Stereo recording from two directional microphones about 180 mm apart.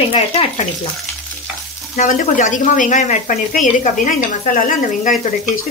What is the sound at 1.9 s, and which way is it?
Speech, 45° left (ahead or behind).